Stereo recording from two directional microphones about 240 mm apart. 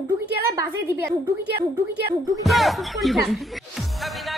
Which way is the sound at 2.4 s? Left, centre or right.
Centre.